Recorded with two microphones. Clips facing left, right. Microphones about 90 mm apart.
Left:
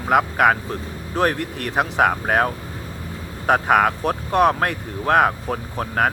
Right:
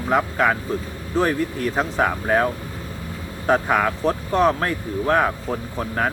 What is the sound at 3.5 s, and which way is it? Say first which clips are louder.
Speech: left 5 dB; 55° left (ahead or behind).